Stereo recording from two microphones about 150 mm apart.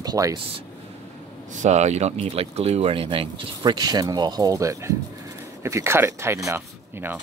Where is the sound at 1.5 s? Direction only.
55° right (ahead or behind).